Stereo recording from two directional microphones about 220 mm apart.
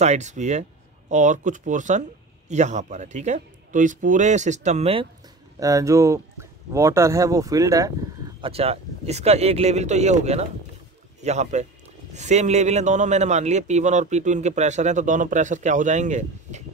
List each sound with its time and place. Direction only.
0.0 s a man's voice: 30° right (ahead or behind)
5.6 s speech: 15° right (ahead or behind)
8.4 s a man's voice: 25° right (ahead or behind)